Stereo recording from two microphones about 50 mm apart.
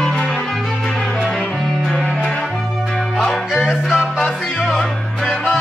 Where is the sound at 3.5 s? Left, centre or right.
Centre.